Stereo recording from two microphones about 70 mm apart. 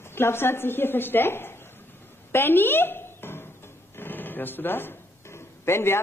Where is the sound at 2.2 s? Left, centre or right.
Left.